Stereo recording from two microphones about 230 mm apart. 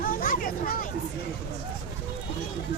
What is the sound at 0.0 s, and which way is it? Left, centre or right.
Vehicle, left.